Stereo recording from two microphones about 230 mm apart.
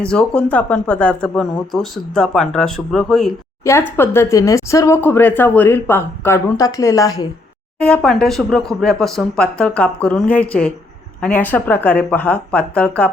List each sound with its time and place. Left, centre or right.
0.0 s speech: centre
3.6 s speech: centre
7.8 s speech: centre